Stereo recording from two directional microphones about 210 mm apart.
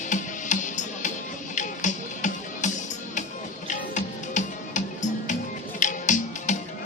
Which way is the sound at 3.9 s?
35° left (ahead or behind).